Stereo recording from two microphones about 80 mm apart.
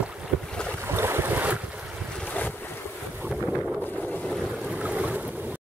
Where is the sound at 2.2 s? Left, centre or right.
Centre.